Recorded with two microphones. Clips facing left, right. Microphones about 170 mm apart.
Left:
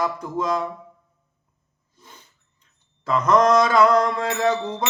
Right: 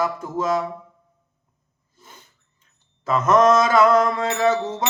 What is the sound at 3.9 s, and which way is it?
Mantra, 25° right (ahead or behind).